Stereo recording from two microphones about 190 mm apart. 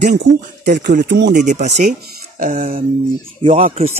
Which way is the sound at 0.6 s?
60° right (ahead or behind).